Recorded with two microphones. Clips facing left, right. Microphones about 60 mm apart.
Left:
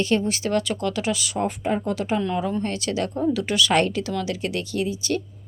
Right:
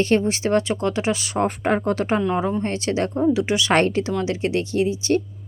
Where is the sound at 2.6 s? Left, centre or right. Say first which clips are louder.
Right 3 dB; right.